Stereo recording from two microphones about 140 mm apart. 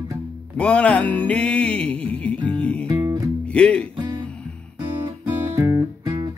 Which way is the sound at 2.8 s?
30° right (ahead or behind).